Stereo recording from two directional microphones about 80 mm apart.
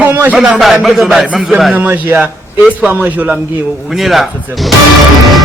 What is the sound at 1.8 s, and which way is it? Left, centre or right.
A man's voice, right.